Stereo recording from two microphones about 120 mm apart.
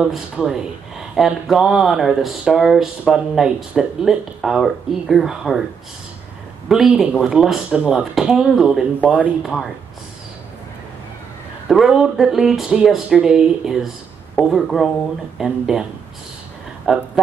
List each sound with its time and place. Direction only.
0.0 s speech: 5° right (ahead or behind)
6.7 s speech: 5° right (ahead or behind)
11.6 s speech: centre (ahead or behind)
16.8 s speech: 5° right (ahead or behind)